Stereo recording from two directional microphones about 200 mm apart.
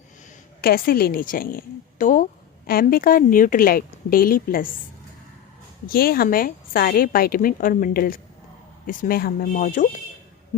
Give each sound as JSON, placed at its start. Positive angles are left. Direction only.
{"t": 0.6, "sound": "a woman's voice", "side_deg": 50}
{"t": 5.8, "sound": "a woman's voice", "side_deg": 50}